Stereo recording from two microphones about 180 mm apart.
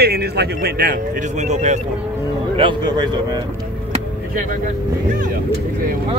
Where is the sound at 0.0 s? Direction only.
60° right (ahead or behind).